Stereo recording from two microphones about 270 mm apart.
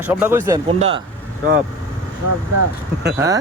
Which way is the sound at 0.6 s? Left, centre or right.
Right.